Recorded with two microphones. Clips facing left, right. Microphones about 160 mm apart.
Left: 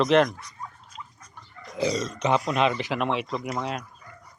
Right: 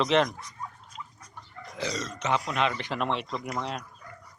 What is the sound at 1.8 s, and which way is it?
Speech, 10° left (ahead or behind).